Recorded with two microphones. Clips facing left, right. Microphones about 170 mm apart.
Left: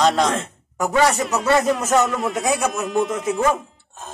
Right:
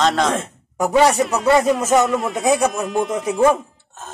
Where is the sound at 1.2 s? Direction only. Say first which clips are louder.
Right 3 dB; centre (ahead or behind).